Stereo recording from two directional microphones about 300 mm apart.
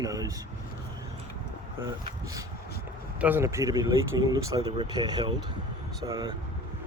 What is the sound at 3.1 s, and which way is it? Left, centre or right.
A man's voice, centre.